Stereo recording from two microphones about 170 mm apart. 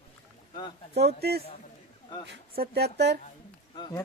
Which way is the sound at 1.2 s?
70° right (ahead or behind).